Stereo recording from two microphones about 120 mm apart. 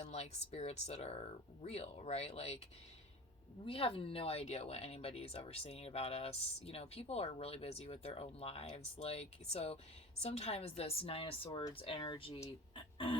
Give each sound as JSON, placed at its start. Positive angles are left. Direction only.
{"t": 0.0, "sound": "speech", "side_deg": 65}
{"t": 3.7, "sound": "speech", "side_deg": 50}
{"t": 12.7, "sound": "a sound", "side_deg": 45}